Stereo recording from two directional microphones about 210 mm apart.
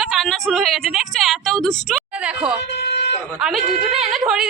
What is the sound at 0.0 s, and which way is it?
A woman's voice, centre (ahead or behind).